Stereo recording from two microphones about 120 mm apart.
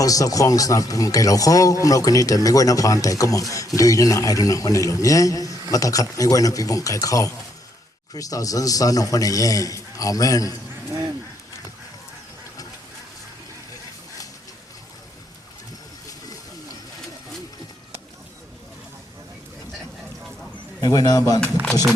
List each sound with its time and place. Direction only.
0.0 s a man's voice: 30° left (ahead or behind)
20.8 s speech: 35° left (ahead or behind)
21.4 s speech: 5° left (ahead or behind)